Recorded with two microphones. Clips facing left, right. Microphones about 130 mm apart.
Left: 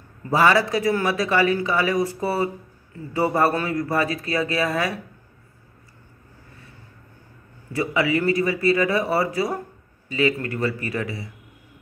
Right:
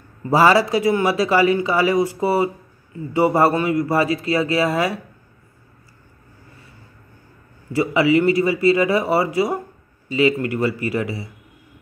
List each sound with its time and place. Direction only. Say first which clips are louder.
0.3 s a man's voice: right 4 dB; 30° right (ahead or behind)
7.7 s a man's voice: right 6 dB; 25° right (ahead or behind)